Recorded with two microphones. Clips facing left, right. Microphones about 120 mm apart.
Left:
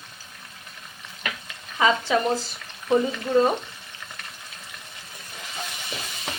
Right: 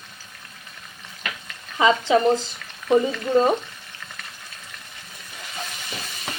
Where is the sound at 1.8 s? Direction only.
20° right (ahead or behind).